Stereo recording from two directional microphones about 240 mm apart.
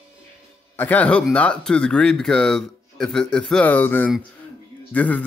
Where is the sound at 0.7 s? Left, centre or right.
Centre.